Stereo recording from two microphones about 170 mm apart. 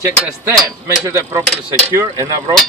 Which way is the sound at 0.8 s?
15° right (ahead or behind).